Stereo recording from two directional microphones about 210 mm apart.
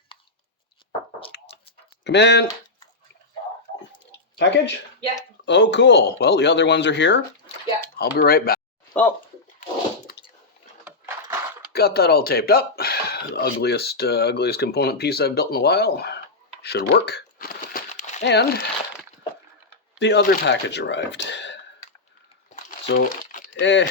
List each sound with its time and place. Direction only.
1.3 s a sound: 55° left (ahead or behind)
2.0 s speech: 55° left (ahead or behind)
4.4 s speech: 55° left (ahead or behind)
7.9 s speech: 45° left (ahead or behind)
10.1 s squish: 45° left (ahead or behind)
10.8 s a sound: 10° right (ahead or behind)
11.7 s speech: 50° left (ahead or behind)
16.6 s crumpling: 50° left (ahead or behind)
18.2 s speech: 55° left (ahead or behind)
20.0 s speech: 55° left (ahead or behind)
22.5 s crumpling: 35° left (ahead or behind)
23.6 s speech: 60° left (ahead or behind)